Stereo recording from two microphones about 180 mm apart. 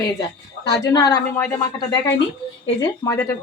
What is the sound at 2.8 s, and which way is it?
Speech, 15° left (ahead or behind).